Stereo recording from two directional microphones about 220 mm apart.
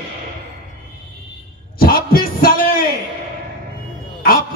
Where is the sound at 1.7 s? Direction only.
40° left (ahead or behind).